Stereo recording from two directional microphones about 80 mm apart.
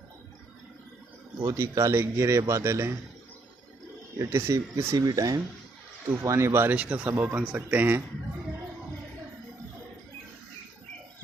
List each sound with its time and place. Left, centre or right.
1.5 s speech: right
4.2 s speech: right
4.9 s speech: right
6.2 s speech: right
6.7 s speech: centre